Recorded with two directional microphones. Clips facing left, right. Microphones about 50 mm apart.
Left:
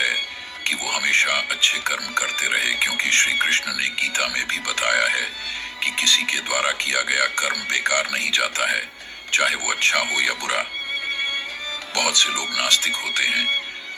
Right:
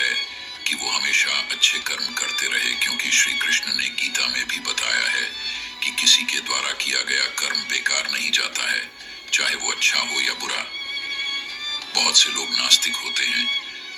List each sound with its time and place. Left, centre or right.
0.0 s speech: left